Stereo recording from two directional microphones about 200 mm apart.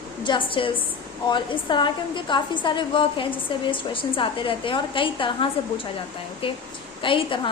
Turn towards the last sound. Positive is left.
turn(degrees=25)  # may be behind; listen again after turning